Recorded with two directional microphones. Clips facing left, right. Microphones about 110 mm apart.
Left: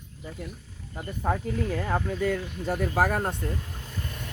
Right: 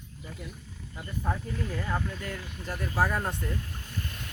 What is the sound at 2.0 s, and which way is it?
Speech, 80° left.